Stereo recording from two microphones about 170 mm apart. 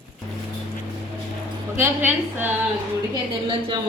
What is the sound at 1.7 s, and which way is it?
Speech, 10° right (ahead or behind).